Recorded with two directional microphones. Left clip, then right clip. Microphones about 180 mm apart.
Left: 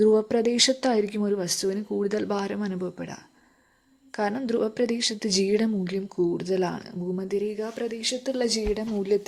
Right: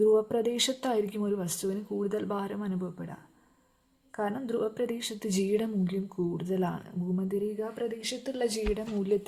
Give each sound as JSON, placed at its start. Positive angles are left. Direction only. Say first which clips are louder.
{"t": 0.0, "sound": "a woman's voice", "louder": "left 4 dB", "side_deg": 35}
{"t": 4.2, "sound": "a woman's voice", "louder": "left 5 dB", "side_deg": 40}